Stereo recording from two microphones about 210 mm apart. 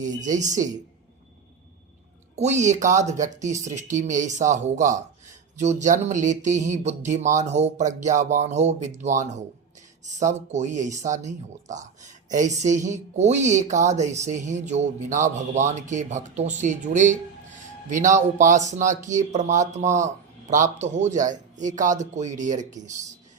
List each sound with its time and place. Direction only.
0.2 s speech: 35° right (ahead or behind)
0.4 s speech: 15° right (ahead or behind)
2.3 s speech: 35° right (ahead or behind)